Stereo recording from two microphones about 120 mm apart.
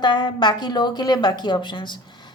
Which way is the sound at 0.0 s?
40° left (ahead or behind).